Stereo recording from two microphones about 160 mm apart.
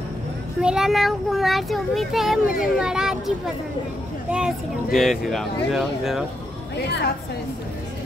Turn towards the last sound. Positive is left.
turn(degrees=90)